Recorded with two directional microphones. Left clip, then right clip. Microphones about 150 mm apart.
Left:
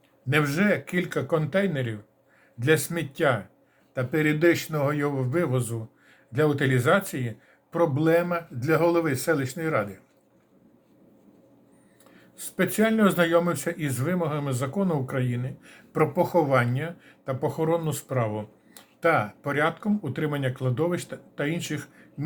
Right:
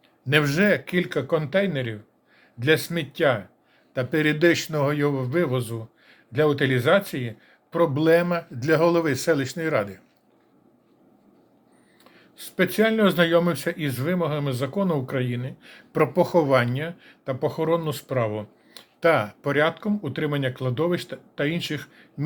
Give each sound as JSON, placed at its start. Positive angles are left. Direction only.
{"t": 0.3, "sound": "speech", "side_deg": -30}
{"t": 12.1, "sound": "speech", "side_deg": -20}